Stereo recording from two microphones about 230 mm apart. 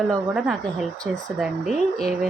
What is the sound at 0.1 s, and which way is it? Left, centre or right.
Speech, centre.